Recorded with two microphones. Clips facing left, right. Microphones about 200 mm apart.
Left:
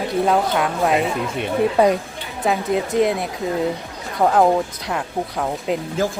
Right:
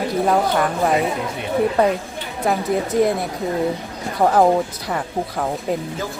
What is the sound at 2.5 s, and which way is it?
Speech, centre (ahead or behind).